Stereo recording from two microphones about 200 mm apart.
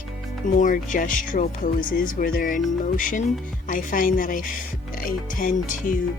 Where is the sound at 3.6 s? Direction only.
40° left (ahead or behind).